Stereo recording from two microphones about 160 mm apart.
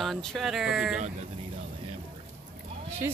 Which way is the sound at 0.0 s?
Centre (ahead or behind).